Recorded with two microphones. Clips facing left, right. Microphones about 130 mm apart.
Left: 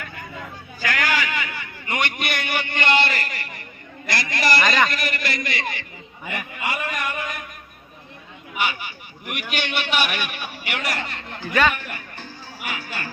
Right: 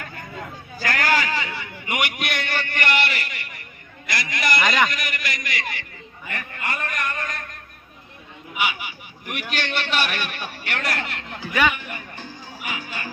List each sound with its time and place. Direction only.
0.8 s a sound: 40° right (ahead or behind)
1.9 s a man's voice: 10° right (ahead or behind)
2.5 s a man's voice: 15° left (ahead or behind)
4.6 s a man's voice: 15° right (ahead or behind)
4.9 s a man's voice: 35° left (ahead or behind)
6.2 s a sound: 15° left (ahead or behind)
8.5 s a sound: 5° right (ahead or behind)
9.2 s a man's voice: 5° left (ahead or behind)
11.3 s music: 10° right (ahead or behind)